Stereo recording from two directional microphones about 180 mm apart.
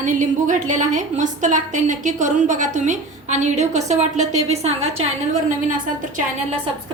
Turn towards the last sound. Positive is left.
turn(degrees=-45)  # may be behind; listen again after turning